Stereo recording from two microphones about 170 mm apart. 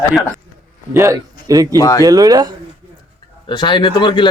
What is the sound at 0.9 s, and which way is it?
Speech, 15° right (ahead or behind).